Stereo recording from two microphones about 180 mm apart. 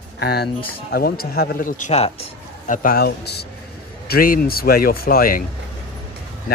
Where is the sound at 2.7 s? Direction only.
50° left (ahead or behind).